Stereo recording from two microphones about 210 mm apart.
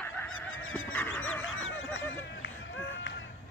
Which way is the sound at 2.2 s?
60° left (ahead or behind).